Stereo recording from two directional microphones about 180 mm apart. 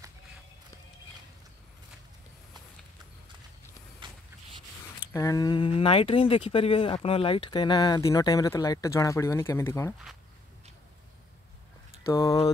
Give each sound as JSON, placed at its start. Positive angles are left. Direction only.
{"t": 4.0, "sound": "a sound", "side_deg": -25}
{"t": 5.1, "sound": "speech", "side_deg": 20}
{"t": 12.1, "sound": "speech", "side_deg": 20}